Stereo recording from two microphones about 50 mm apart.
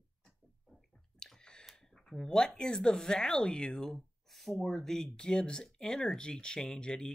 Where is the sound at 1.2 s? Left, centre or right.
Centre.